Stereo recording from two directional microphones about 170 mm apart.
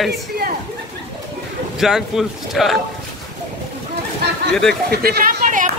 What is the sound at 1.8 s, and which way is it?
Speech, centre (ahead or behind).